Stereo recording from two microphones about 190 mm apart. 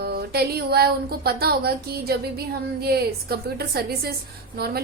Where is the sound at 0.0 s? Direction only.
55° right (ahead or behind).